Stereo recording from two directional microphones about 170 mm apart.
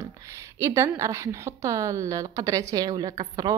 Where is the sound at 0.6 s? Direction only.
15° right (ahead or behind).